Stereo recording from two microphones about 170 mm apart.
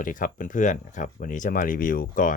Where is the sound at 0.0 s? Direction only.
50° left (ahead or behind).